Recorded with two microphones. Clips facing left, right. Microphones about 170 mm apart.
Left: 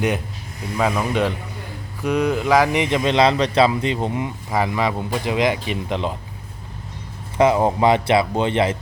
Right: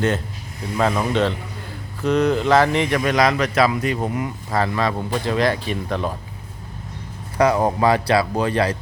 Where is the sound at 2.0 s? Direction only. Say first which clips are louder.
Right 2 dB; 10° left (ahead or behind).